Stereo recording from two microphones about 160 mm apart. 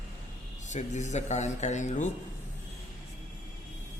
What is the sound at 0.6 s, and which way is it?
Speech, 50° left (ahead or behind).